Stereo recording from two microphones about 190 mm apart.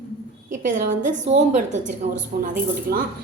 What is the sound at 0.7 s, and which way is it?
A woman's voice, 45° right (ahead or behind).